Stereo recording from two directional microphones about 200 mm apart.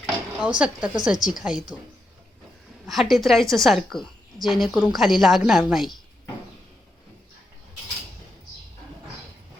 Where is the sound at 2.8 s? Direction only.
Centre (ahead or behind).